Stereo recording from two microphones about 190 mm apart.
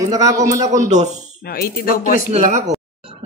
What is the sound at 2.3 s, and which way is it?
Speech, 35° right (ahead or behind).